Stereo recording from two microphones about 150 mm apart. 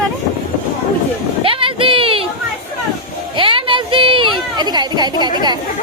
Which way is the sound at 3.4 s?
35° right (ahead or behind).